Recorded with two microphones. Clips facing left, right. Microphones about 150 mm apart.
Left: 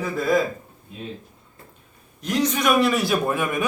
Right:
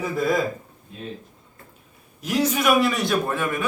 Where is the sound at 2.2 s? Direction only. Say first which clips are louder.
Even; 5° right (ahead or behind); by 3.4 s 10° left (ahead or behind).